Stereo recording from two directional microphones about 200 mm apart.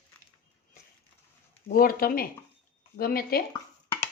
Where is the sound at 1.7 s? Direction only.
45° left (ahead or behind).